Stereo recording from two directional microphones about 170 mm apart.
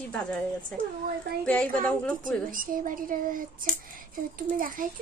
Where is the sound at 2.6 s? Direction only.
55° right (ahead or behind).